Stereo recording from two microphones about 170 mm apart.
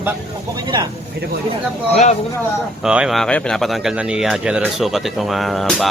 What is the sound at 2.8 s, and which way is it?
Speech, 5° right (ahead or behind).